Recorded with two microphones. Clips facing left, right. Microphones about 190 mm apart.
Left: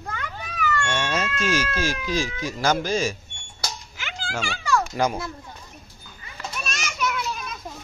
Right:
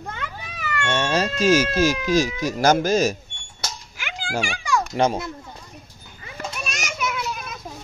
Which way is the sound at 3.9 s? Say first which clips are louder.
Right 6 dB; 10° right (ahead or behind).